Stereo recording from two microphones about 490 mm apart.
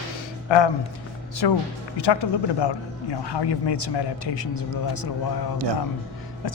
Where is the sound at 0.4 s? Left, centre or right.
Left.